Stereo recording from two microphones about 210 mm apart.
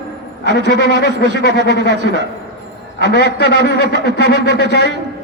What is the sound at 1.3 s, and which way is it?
Speech, 55° right (ahead or behind).